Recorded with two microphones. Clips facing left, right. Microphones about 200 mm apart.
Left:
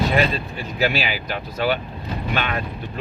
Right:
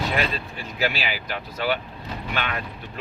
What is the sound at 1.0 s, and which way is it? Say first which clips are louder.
Speech: left 3 dB; 45° left (ahead or behind).